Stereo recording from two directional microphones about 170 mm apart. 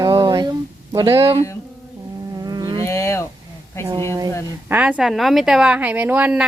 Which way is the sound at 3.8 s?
15° left (ahead or behind).